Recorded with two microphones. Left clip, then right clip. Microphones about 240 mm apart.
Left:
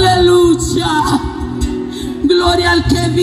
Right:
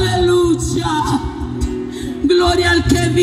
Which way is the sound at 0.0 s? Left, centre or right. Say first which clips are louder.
Left 5 dB; centre.